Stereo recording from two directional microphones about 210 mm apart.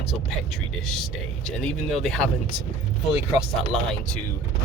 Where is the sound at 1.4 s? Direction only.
Centre (ahead or behind).